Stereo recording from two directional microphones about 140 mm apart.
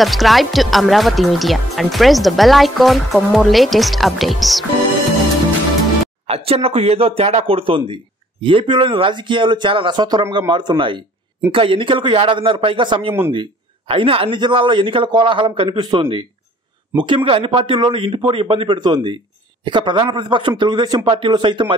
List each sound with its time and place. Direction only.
0.0 s speech: centre (ahead or behind)
6.2 s speech: 45° right (ahead or behind)